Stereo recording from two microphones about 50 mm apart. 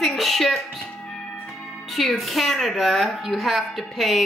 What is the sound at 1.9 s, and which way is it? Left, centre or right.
A woman's voice, centre.